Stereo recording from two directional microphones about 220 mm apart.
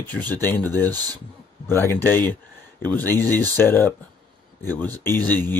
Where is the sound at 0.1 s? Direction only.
10° left (ahead or behind).